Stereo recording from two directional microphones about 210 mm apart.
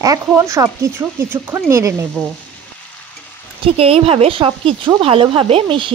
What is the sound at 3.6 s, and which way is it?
A woman's voice, 25° right (ahead or behind).